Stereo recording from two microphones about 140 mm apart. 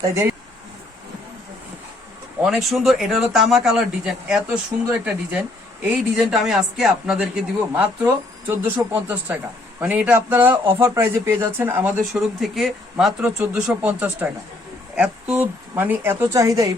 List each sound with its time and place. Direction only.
0.0 s speech: 20° right (ahead or behind)
2.4 s speech: centre (ahead or behind)
12.4 s speech: centre (ahead or behind); by 16.6 s 25° right (ahead or behind)